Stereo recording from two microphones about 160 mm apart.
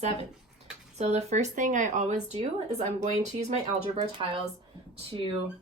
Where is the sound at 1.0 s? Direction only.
45° right (ahead or behind).